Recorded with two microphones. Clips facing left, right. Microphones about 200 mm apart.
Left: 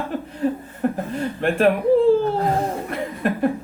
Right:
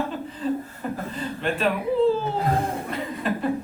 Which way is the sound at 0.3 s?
65° left (ahead or behind).